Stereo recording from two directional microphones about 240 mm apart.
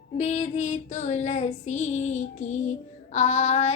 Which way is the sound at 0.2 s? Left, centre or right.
Left.